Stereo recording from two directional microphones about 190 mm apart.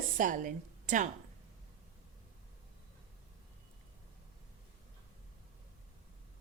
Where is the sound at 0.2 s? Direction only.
45° right (ahead or behind).